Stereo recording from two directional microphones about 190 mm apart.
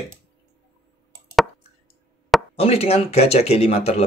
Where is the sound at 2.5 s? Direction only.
35° left (ahead or behind).